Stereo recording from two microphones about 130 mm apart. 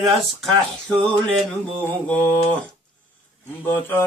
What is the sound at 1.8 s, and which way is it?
Mantra, 15° left (ahead or behind).